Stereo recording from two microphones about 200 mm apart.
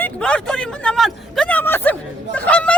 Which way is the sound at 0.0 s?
5° left (ahead or behind).